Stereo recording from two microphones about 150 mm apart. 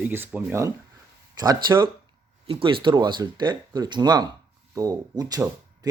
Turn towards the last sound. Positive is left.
turn(degrees=-25)  # may be behind; listen again after turning